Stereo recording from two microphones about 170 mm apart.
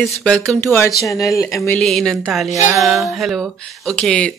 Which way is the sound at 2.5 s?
20° right (ahead or behind).